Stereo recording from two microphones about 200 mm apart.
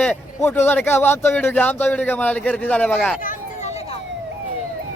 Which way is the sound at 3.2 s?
40° left (ahead or behind).